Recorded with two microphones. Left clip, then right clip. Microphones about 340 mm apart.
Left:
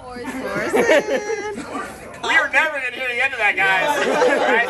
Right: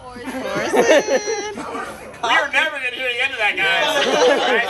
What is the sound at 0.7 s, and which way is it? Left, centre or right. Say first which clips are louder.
Speech: right 2 dB; right.